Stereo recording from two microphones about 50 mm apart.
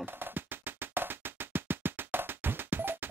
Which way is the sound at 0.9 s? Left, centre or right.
Right.